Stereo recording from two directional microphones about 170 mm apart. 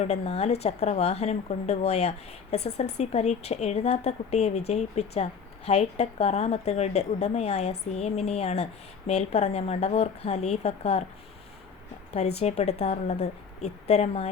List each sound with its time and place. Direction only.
0.0 s a woman's voice: 40° left (ahead or behind)
12.1 s a woman's voice: 40° left (ahead or behind)